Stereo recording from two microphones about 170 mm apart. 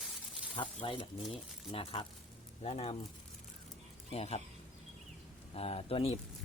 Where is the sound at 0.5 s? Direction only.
30° left (ahead or behind).